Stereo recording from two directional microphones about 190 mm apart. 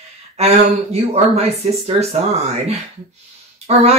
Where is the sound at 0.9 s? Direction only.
35° right (ahead or behind).